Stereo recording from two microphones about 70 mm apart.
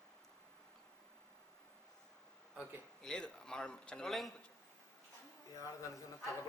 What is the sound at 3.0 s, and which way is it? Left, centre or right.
A man's voice, centre.